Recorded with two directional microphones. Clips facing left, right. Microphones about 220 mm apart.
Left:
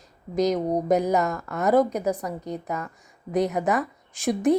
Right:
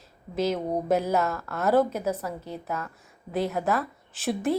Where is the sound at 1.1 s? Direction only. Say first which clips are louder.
Left 2 dB; 5° right (ahead or behind).